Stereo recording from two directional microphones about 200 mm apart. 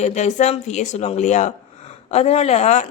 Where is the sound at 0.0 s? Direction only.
35° left (ahead or behind).